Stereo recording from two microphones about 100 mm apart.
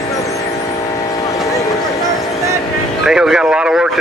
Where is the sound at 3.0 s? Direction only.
5° right (ahead or behind).